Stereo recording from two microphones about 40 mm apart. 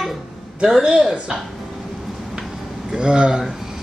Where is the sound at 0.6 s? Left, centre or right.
Centre.